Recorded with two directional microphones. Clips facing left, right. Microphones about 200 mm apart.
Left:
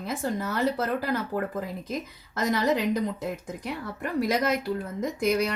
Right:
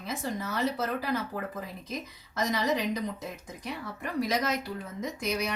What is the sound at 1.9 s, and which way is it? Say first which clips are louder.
Speech: left 5 dB; 55° left (ahead or behind).